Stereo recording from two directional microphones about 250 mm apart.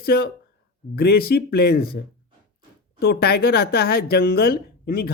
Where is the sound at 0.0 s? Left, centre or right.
Left.